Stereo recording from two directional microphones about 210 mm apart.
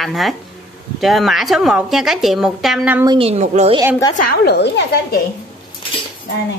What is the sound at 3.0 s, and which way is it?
Speech, 25° right (ahead or behind).